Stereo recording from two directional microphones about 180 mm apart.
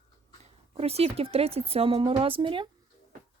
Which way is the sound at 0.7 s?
35° right (ahead or behind).